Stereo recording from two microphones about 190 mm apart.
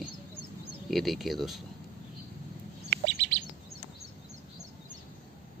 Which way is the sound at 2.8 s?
60° right (ahead or behind).